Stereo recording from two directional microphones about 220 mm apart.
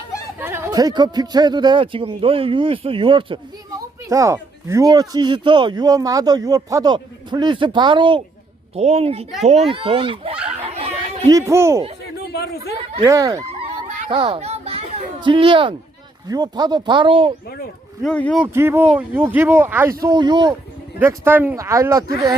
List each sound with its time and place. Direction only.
0.3 s speech: 10° right (ahead or behind)
10.3 s a sound: 5° right (ahead or behind)
10.8 s chatter: 30° right (ahead or behind)
11.3 s speech: 15° right (ahead or behind)
12.2 s a sound: 45° left (ahead or behind)
13.0 s speech: 15° right (ahead or behind)
14.1 s children playing: 25° right (ahead or behind)
16.3 s speech: 20° right (ahead or behind)
18.0 s speech: 5° left (ahead or behind)
18.3 s speech: 10° right (ahead or behind)